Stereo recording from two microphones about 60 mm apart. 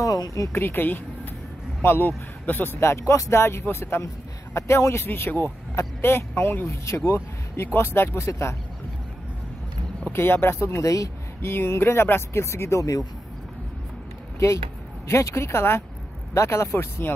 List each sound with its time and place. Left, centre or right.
0.0 s a sound: left
0.5 s speech: left
8.3 s speech: left
10.1 s speech: left
10.8 s speech: left
11.4 s speech: left
15.0 s speech: left
17.0 s speech: left